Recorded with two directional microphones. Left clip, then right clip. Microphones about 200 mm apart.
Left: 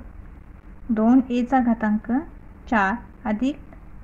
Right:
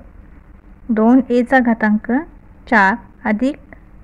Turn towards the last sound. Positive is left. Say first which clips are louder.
# right 7 dB
turn(degrees=-60)  # may be behind; listen again after turning